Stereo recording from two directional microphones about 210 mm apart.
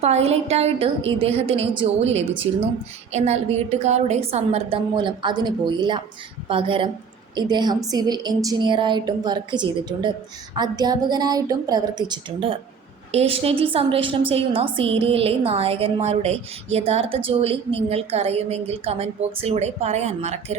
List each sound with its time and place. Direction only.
0.0 s a woman's voice: 30° right (ahead or behind)